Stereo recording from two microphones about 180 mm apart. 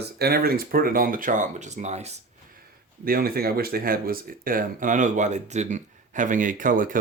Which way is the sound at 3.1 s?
55° right (ahead or behind).